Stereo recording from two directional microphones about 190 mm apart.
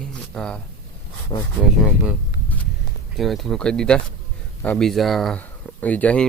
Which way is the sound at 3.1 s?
Centre (ahead or behind).